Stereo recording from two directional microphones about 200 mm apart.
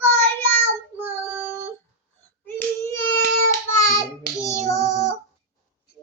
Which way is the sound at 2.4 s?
10° left (ahead or behind).